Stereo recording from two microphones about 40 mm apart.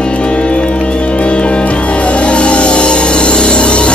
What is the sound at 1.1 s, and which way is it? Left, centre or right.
Music, left.